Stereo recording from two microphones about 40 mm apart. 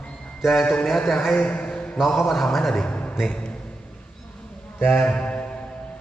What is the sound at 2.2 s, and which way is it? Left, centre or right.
Speech, centre.